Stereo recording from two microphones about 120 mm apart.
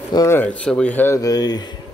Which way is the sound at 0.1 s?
35° left (ahead or behind).